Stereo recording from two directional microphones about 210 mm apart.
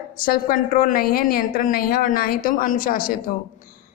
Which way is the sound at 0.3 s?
40° left (ahead or behind).